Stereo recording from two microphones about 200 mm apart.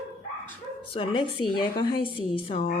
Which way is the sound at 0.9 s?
25° left (ahead or behind).